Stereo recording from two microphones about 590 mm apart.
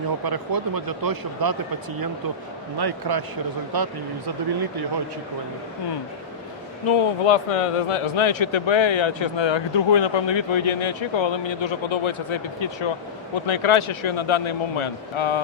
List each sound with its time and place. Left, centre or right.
0.3 s speech: right
2.7 s speech: right
6.8 s speech: left